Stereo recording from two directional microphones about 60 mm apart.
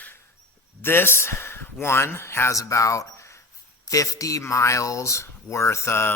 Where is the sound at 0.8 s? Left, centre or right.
Left.